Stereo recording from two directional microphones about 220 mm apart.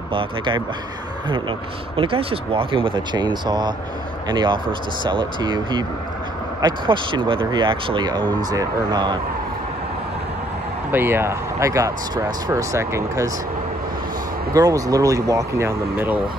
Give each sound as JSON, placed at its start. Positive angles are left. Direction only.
{"t": 0.1, "sound": "speech", "side_deg": -25}
{"t": 2.0, "sound": "speech", "side_deg": -25}
{"t": 10.9, "sound": "speech", "side_deg": -10}
{"t": 14.5, "sound": "speech", "side_deg": -15}